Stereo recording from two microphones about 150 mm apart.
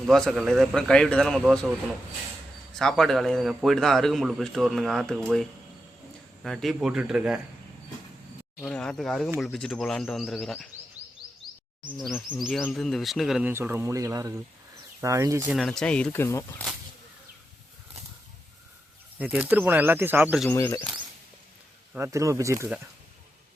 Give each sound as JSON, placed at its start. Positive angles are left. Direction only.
{"t": 0.1, "sound": "a man's voice", "side_deg": 0}
{"t": 2.7, "sound": "a man's voice", "side_deg": 0}
{"t": 8.6, "sound": "a man's voice", "side_deg": 5}
{"t": 11.0, "sound": "chirp", "side_deg": -10}
{"t": 11.9, "sound": "a man's voice", "side_deg": 0}
{"t": 13.5, "sound": "speech", "side_deg": -15}
{"t": 15.5, "sound": "speech", "side_deg": 5}
{"t": 19.2, "sound": "speech", "side_deg": -10}
{"t": 20.5, "sound": "speech", "side_deg": 20}
{"t": 21.9, "sound": "speech", "side_deg": -20}